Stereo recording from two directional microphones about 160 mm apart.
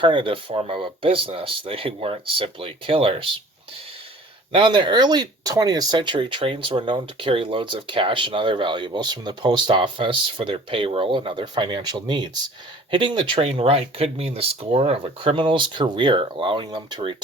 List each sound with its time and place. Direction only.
0.0 s speech: 30° right (ahead or behind)
4.5 s speech: 30° right (ahead or behind)